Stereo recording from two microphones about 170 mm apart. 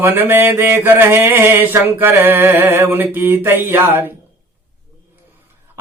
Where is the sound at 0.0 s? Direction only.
10° right (ahead or behind).